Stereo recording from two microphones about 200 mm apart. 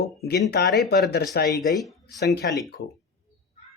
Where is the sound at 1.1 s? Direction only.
50° left (ahead or behind).